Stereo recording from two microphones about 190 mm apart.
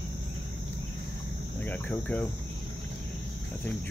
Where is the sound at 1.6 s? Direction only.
5° left (ahead or behind).